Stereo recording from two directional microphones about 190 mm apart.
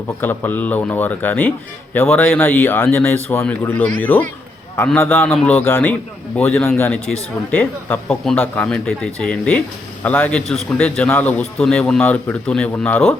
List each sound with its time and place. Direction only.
0.2 s a man's voice: 10° left (ahead or behind)